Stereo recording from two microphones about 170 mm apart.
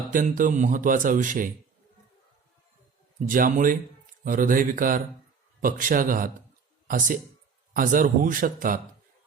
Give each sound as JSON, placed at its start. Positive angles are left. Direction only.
{"t": 0.1, "sound": "speech", "side_deg": -50}
{"t": 3.2, "sound": "speech", "side_deg": -55}